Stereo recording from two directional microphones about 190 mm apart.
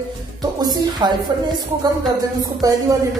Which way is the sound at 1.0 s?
20° right (ahead or behind).